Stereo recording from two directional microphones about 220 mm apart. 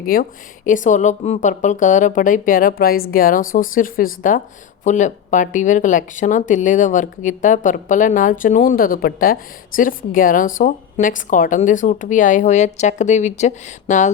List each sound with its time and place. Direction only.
0.1 s speech: 40° left (ahead or behind)